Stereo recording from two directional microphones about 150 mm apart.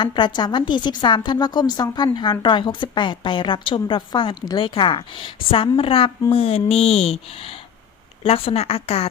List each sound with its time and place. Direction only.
0.0 s a woman's voice: 30° left (ahead or behind)